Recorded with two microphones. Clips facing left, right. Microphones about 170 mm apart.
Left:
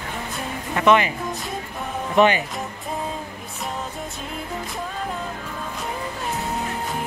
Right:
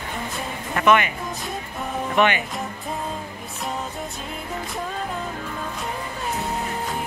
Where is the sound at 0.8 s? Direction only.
25° left (ahead or behind).